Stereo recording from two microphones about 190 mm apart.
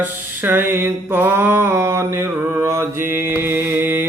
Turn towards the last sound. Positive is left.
turn(degrees=-10)  # may be behind; listen again after turning